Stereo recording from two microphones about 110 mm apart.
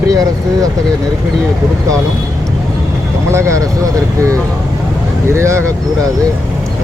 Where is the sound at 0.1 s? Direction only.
35° right (ahead or behind).